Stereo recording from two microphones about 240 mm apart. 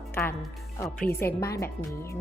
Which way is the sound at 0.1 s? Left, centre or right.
Centre.